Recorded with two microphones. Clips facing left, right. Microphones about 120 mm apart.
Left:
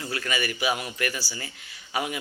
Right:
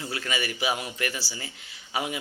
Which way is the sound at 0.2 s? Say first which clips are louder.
Left 2 dB; 25° right (ahead or behind).